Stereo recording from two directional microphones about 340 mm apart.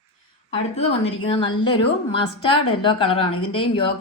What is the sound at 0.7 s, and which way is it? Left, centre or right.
A woman's voice, centre.